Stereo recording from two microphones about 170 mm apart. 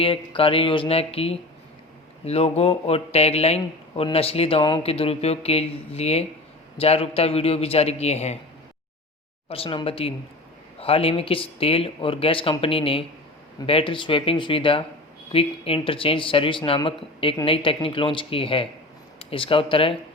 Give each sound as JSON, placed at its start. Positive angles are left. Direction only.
{"t": 0.0, "sound": "speech", "side_deg": 30}
{"t": 9.5, "sound": "speech", "side_deg": 30}